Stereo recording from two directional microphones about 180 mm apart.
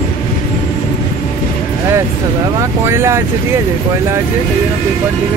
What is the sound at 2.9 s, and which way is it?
Speech, 15° right (ahead or behind).